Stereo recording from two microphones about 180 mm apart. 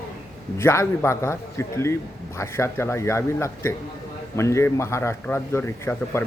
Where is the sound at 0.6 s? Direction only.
15° left (ahead or behind).